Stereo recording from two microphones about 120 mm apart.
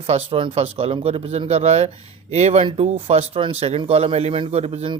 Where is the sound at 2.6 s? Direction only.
50° right (ahead or behind).